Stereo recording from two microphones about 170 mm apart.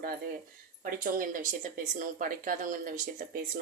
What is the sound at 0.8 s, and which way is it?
Speech, 55° right (ahead or behind).